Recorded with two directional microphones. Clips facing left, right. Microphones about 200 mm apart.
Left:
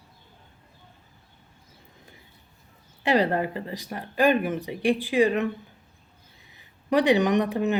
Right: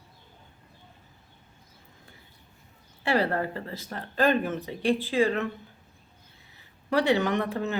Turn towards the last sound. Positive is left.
turn(degrees=15)  # may be behind; listen again after turning